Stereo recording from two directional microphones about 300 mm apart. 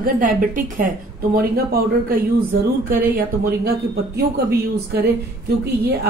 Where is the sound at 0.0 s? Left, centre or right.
Right.